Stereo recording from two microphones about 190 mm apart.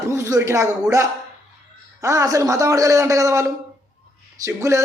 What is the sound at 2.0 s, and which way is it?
A man's voice, 20° right (ahead or behind).